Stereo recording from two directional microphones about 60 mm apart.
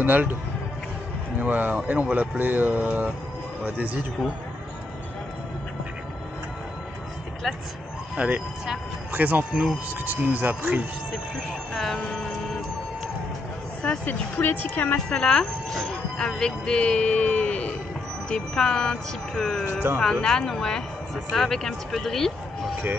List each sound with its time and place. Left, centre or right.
0.0 s speech: right
1.4 s speech: right
8.2 s speech: right
9.5 s speech: centre
10.0 s speech: right
11.7 s speech: centre
13.8 s speech: left
15.0 s speech: centre